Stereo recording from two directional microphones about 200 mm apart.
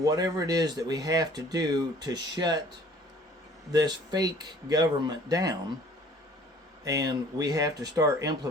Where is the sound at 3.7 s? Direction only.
20° right (ahead or behind).